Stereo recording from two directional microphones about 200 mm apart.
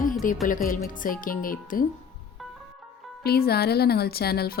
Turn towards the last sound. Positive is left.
turn(degrees=50)  # may be behind; listen again after turning